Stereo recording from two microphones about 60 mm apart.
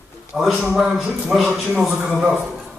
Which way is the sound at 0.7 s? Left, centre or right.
Centre.